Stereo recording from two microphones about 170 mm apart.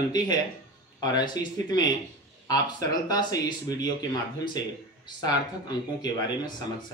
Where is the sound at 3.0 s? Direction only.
20° left (ahead or behind).